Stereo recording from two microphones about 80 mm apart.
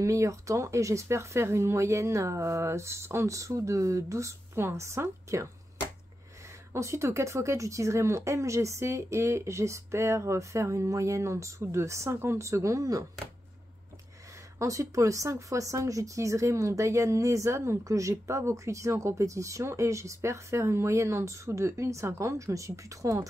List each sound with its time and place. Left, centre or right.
0.0 s speech: right
6.7 s speech: right
14.6 s speech: right